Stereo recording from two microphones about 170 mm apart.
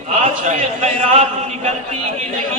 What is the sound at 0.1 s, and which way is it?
A man's voice, 45° right (ahead or behind).